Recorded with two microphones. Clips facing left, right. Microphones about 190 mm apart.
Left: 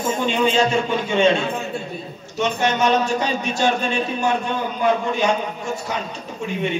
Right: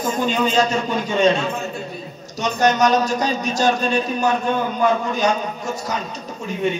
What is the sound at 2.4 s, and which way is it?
A man's voice, 40° right (ahead or behind).